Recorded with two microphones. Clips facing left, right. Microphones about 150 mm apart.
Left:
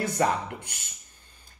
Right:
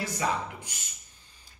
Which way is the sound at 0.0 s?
55° left (ahead or behind).